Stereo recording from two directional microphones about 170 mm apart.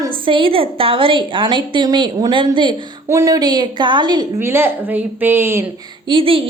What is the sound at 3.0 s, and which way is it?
A woman's voice, 20° right (ahead or behind).